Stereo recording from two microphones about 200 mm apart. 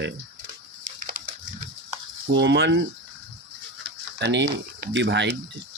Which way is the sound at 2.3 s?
60° right (ahead or behind).